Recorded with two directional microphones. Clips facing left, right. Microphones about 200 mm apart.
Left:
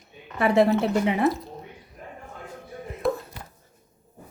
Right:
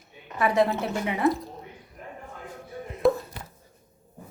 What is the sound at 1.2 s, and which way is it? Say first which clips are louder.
Speech: even; centre (ahead or behind).